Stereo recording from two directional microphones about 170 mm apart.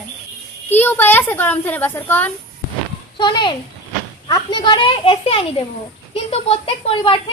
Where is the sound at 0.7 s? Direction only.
10° left (ahead or behind).